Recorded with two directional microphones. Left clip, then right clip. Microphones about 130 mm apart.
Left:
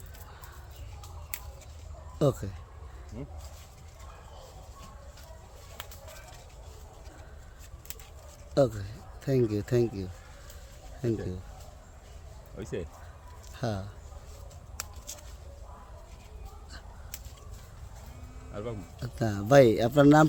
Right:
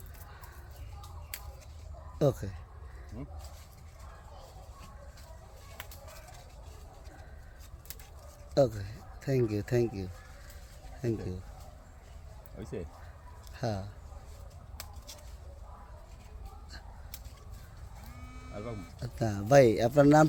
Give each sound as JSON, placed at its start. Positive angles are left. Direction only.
{"t": 2.1, "sound": "speech", "side_deg": 0}
{"t": 3.1, "sound": "speech", "side_deg": 20}
{"t": 8.5, "sound": "speech", "side_deg": 0}
{"t": 12.5, "sound": "speech", "side_deg": 25}
{"t": 13.6, "sound": "speech", "side_deg": 0}
{"t": 18.5, "sound": "speech", "side_deg": 20}
{"t": 19.0, "sound": "speech", "side_deg": 10}